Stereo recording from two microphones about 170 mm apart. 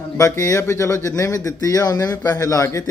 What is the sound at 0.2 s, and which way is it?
Speech, 15° left (ahead or behind).